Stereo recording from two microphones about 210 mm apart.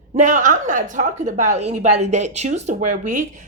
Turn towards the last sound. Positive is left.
turn(degrees=-35)  # may be behind; listen again after turning